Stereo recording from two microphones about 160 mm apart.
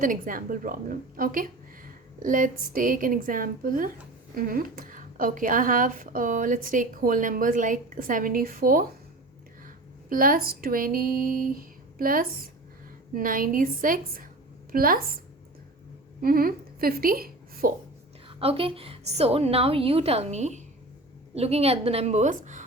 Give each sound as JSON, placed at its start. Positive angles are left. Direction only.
{"t": 0.0, "sound": "a woman's voice", "side_deg": -55}
{"t": 16.2, "sound": "a woman's voice", "side_deg": -65}
{"t": 18.3, "sound": "a woman's voice", "side_deg": -35}